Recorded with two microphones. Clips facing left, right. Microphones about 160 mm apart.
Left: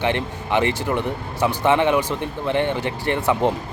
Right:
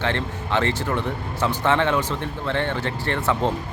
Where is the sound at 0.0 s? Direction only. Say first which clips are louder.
Left 3 dB; 15° left (ahead or behind).